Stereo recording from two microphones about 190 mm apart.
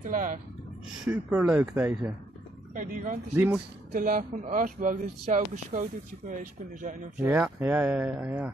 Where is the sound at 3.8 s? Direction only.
45° right (ahead or behind).